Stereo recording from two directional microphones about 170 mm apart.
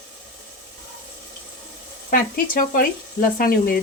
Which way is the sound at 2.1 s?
50° left (ahead or behind).